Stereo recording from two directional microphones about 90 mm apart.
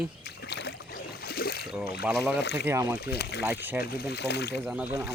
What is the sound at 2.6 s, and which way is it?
Speech, 35° right (ahead or behind).